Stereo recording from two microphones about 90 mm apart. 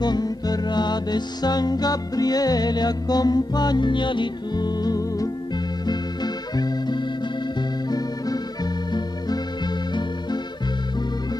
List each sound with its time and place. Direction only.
0.0 s music: 50° left (ahead or behind)
5.9 s organ: 50° left (ahead or behind)